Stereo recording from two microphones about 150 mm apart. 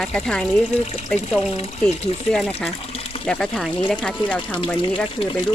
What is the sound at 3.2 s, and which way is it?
Speech, 5° left (ahead or behind).